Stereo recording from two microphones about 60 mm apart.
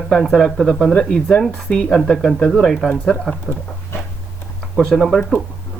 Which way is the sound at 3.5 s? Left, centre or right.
Right.